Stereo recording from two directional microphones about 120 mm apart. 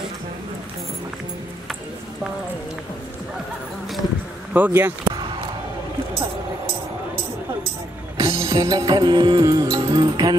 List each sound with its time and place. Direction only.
4.6 s speech: 15° right (ahead or behind)
5.0 s basketball bounce: 40° right (ahead or behind)
8.2 s music: 25° right (ahead or behind)